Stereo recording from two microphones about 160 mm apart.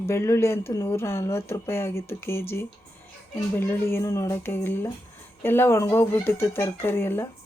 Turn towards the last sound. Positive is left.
turn(degrees=15)  # may be behind; listen again after turning